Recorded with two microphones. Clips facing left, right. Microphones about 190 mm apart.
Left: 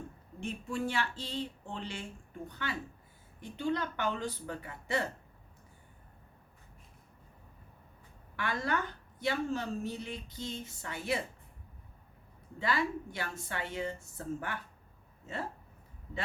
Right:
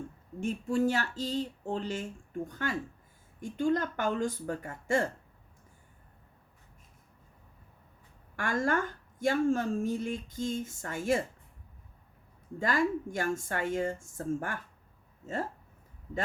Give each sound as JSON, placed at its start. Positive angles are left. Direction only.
{"t": 0.3, "sound": "a woman's voice", "side_deg": -45}
{"t": 8.4, "sound": "a woman's voice", "side_deg": -45}
{"t": 12.5, "sound": "a woman's voice", "side_deg": -45}